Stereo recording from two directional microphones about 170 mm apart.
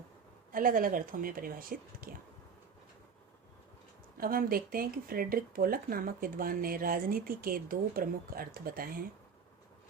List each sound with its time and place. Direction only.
0.5 s speech: 55° right (ahead or behind)
4.2 s speech: 60° right (ahead or behind)